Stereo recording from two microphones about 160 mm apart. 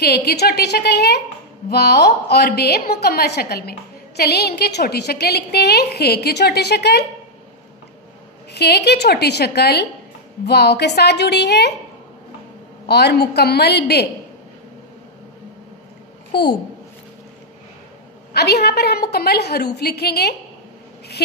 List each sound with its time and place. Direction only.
0.0 s a woman's voice: 85° left
8.5 s a woman's voice: 90° left
12.8 s a woman's voice: 90° left
18.3 s a woman's voice: 90° left